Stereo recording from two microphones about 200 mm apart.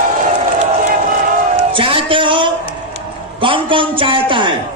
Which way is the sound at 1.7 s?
25° right (ahead or behind).